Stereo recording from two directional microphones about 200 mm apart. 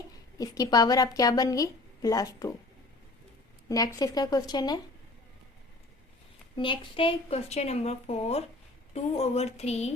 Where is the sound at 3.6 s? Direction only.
20° left (ahead or behind).